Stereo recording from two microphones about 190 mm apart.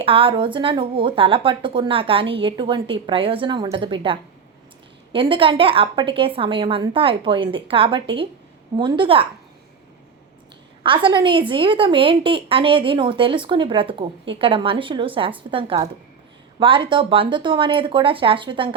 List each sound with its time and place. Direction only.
0.0 s a woman's voice: 30° right (ahead or behind)
10.8 s a woman's voice: 25° right (ahead or behind)